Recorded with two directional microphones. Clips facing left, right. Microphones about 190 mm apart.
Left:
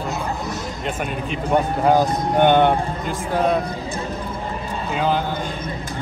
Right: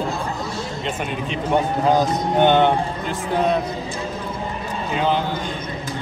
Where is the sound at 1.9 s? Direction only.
10° left (ahead or behind).